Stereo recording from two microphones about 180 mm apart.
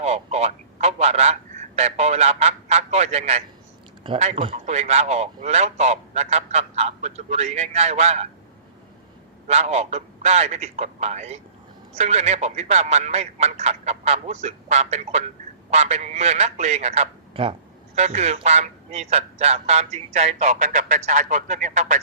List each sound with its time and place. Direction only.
0.0 s a man's voice: 35° right (ahead or behind)
9.5 s a man's voice: 35° right (ahead or behind)